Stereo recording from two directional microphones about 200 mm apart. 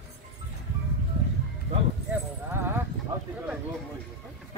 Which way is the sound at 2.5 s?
10° right (ahead or behind).